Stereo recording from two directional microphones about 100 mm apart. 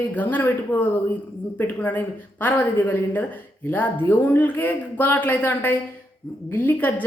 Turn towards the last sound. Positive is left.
turn(degrees=15)  # may be behind; listen again after turning